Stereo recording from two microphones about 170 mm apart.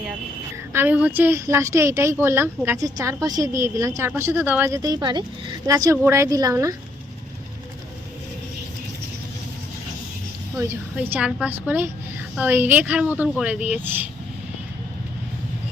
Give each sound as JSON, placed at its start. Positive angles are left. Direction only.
{"t": 0.7, "sound": "speech", "side_deg": -10}
{"t": 10.6, "sound": "speech", "side_deg": -15}